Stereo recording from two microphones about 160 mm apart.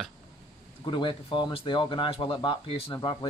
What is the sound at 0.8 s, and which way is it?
Speech, 30° left (ahead or behind).